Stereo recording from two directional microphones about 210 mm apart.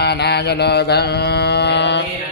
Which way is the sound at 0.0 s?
50° left (ahead or behind).